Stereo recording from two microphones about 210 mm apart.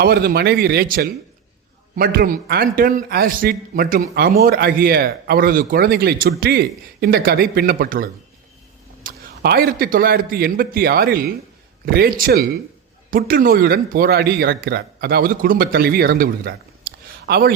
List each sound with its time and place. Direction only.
0.0 s a man's voice: 45° right (ahead or behind)